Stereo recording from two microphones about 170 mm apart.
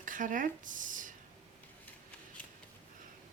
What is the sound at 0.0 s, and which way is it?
Speech, 50° right (ahead or behind).